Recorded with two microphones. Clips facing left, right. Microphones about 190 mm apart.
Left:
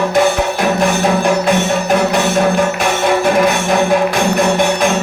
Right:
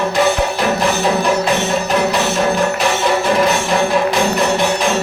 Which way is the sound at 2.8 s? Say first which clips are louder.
Left 2 dB; 50° left (ahead or behind).